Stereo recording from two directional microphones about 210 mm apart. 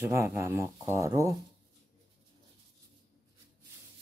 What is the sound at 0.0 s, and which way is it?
Speech, 15° right (ahead or behind).